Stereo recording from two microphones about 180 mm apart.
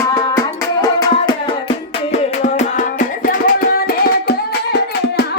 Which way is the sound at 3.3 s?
55° left (ahead or behind).